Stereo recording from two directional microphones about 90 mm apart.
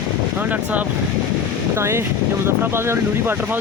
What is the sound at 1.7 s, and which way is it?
Speech, 30° right (ahead or behind).